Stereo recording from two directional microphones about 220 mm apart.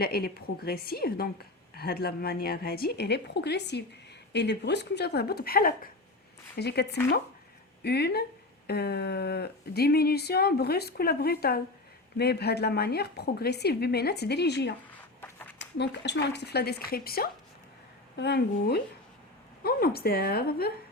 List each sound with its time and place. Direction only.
0.0 s a woman's voice: 45° left (ahead or behind)
7.9 s a woman's voice: 45° left (ahead or behind)
15.8 s a woman's voice: 50° left (ahead or behind)